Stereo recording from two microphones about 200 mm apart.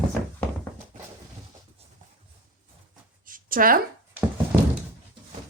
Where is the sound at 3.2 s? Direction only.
45° right (ahead or behind).